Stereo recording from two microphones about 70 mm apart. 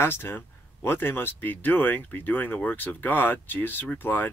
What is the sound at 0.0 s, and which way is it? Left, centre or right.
Speech, left.